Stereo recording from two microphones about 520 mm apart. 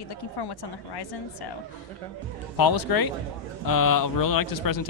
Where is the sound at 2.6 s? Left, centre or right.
Left.